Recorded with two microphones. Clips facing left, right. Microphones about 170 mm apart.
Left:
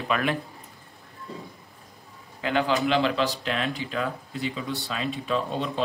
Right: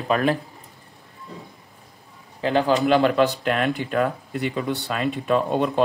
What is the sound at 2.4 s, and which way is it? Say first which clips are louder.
Speech: right 5 dB; 40° right (ahead or behind).